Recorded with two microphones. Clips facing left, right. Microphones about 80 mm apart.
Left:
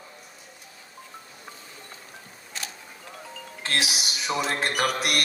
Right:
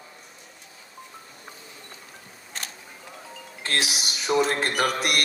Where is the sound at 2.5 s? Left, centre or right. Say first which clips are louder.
Even; right.